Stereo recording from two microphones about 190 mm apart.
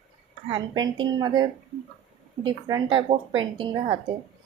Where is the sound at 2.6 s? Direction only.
25° right (ahead or behind).